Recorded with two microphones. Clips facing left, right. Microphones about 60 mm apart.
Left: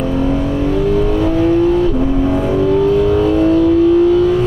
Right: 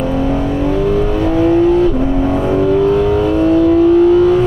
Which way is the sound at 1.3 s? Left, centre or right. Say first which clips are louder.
Right 3 dB; right.